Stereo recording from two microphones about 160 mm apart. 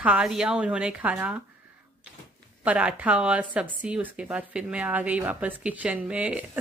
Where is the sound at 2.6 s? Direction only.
10° right (ahead or behind).